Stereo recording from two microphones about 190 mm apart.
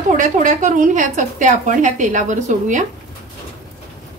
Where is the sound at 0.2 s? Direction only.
40° right (ahead or behind).